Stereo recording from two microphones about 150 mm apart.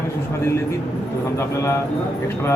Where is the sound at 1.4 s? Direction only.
20° left (ahead or behind).